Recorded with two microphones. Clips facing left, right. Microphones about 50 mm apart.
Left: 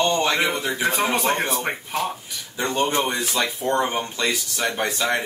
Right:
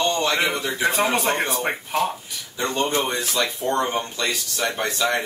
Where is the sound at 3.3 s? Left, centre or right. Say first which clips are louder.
Even; centre.